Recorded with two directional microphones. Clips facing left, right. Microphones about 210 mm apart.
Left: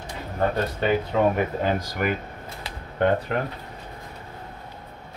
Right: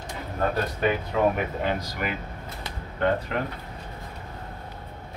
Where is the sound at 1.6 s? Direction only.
45° left (ahead or behind).